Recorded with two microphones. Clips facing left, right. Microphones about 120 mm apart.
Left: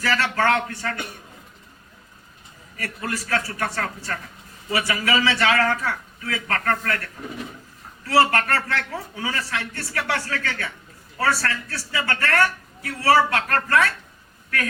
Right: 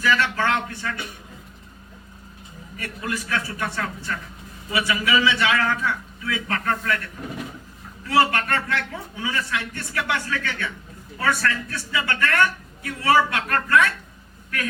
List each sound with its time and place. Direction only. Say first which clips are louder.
0.0 s a man's voice: even; 40° left (ahead or behind)
2.7 s a man's voice: even; 40° left (ahead or behind)
8.0 s a man's voice: left 1 dB; 35° left (ahead or behind)